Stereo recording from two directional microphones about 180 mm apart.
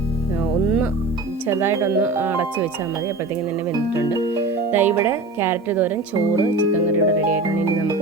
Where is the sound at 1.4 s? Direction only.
15° right (ahead or behind).